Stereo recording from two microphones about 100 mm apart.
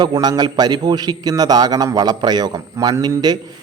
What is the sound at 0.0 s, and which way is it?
A man's voice, 45° right (ahead or behind).